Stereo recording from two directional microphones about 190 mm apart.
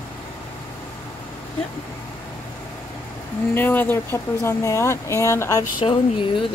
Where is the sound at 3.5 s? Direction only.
10° left (ahead or behind).